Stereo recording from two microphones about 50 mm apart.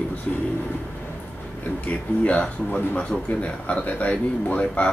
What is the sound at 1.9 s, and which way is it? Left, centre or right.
Speech, left.